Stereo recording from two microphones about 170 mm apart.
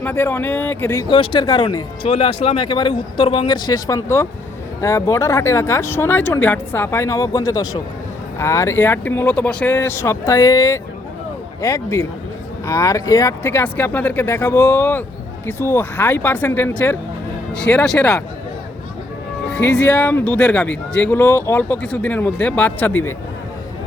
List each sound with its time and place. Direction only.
0.0 s speech: 10° left (ahead or behind)
1.0 s speech: 30° left (ahead or behind); by 18.2 s 5° left (ahead or behind)
19.5 s speech: 10° left (ahead or behind)